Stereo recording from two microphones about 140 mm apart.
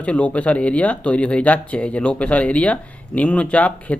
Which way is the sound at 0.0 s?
10° left (ahead or behind).